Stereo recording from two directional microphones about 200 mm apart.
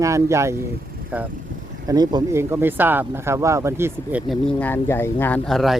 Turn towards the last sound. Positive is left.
turn(degrees=0)  # may be behind; listen again after turning